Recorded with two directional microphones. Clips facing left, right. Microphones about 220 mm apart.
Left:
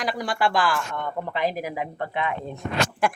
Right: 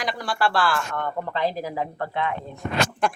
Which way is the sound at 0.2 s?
15° left (ahead or behind).